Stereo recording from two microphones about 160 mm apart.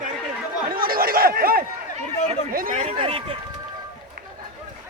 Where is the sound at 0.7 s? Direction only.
65° right (ahead or behind).